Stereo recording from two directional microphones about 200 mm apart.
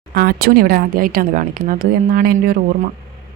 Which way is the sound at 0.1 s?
50° right (ahead or behind).